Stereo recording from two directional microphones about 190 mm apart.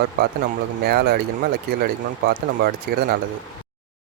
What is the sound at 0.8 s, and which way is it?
Speech, 55° right (ahead or behind).